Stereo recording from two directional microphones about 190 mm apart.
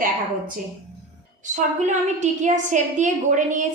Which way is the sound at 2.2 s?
40° right (ahead or behind).